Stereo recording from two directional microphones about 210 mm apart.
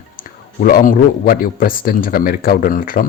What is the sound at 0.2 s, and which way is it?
Speech, 45° left (ahead or behind).